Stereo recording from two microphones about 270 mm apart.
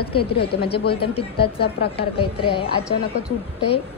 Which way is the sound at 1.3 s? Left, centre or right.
Left.